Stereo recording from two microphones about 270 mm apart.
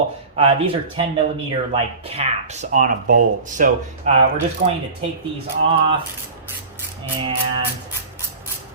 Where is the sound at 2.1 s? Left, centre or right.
Right.